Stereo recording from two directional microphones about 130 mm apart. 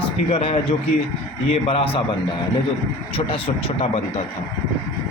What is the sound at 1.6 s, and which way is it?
Speech, 45° left (ahead or behind).